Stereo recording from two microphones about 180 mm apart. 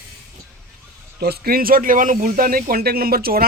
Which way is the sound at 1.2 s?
60° right (ahead or behind).